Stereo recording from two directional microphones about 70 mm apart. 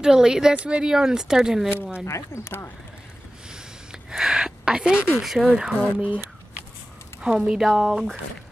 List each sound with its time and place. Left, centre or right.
0.0 s speech: centre
1.8 s speech: centre
2.0 s speech: left
2.4 s speech: left
4.1 s speech: centre
5.5 s speech: centre